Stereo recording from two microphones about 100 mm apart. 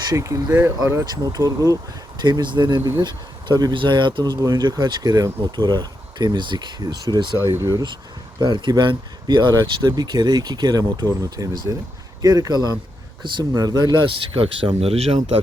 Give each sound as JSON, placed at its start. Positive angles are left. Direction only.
{"t": 0.1, "sound": "speech", "side_deg": -35}
{"t": 1.1, "sound": "speech", "side_deg": -45}
{"t": 2.2, "sound": "speech", "side_deg": -50}
{"t": 7.3, "sound": "speech", "side_deg": -25}
{"t": 8.4, "sound": "speech", "side_deg": -50}
{"t": 14.8, "sound": "speech", "side_deg": -90}